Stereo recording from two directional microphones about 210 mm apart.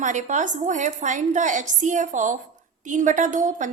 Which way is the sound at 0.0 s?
35° right (ahead or behind).